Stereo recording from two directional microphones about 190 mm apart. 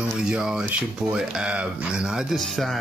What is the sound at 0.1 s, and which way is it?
Speech, 5° right (ahead or behind).